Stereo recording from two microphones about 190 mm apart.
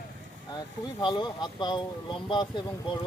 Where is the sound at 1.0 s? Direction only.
20° left (ahead or behind).